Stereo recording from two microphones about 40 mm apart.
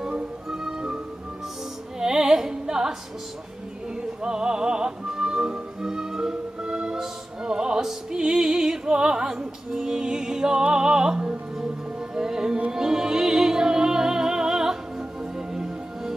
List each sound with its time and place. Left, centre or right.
0.0 s music: centre
2.0 s music: centre
4.2 s music: centre